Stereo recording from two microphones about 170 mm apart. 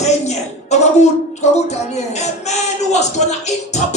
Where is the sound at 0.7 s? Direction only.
40° left (ahead or behind).